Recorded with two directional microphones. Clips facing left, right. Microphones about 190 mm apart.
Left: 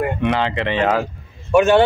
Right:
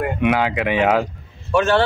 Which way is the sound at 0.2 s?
10° right (ahead or behind).